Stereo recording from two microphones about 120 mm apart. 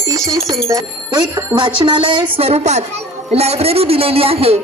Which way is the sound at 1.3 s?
40° right (ahead or behind).